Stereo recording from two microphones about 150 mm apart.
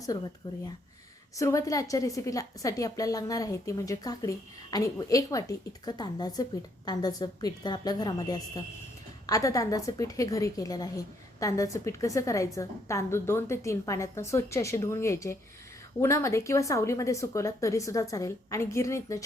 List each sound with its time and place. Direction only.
1.4 s a woman's voice: 20° left (ahead or behind)